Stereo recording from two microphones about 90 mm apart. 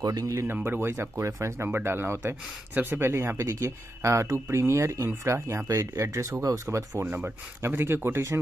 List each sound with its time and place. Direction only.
0.0 s speech: 40° right (ahead or behind)
0.5 s speech: 25° right (ahead or behind)
7.0 s speech: 25° right (ahead or behind)